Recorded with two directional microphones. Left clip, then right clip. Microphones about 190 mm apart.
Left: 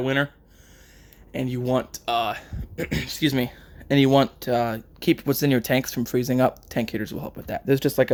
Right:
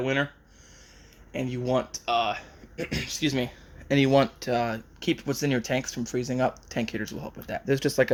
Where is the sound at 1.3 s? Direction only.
30° left (ahead or behind).